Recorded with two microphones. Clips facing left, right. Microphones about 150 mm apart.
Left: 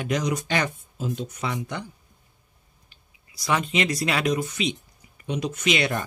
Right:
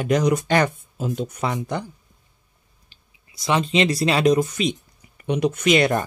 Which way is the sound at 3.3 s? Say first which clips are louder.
Right 4 dB; 25° right (ahead or behind).